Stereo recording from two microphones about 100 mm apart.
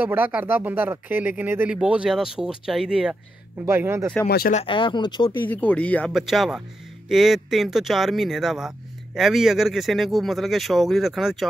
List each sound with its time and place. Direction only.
0.0 s speech: 20° right (ahead or behind)
3.6 s speech: 25° right (ahead or behind)
4.6 s speech: 55° left (ahead or behind)
5.5 s speech: 15° left (ahead or behind)
6.1 s speech: centre (ahead or behind)